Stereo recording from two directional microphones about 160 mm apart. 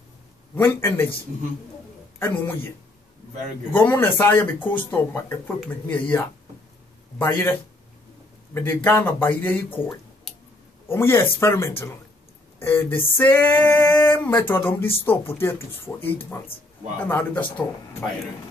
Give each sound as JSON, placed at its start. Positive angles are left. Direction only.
{"t": 0.6, "sound": "female singing", "side_deg": 15}
{"t": 2.1, "sound": "female singing", "side_deg": 15}
{"t": 3.7, "sound": "female singing", "side_deg": 10}
{"t": 8.5, "sound": "female singing", "side_deg": 15}